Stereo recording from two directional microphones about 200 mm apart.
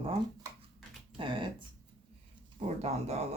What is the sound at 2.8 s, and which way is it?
Speech, 35° right (ahead or behind).